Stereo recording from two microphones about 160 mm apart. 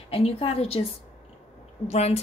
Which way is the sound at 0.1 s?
40° left (ahead or behind).